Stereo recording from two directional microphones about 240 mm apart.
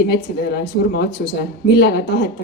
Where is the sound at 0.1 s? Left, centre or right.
Left.